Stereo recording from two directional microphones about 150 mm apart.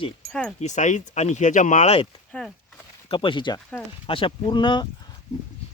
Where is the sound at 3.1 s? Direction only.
35° left (ahead or behind).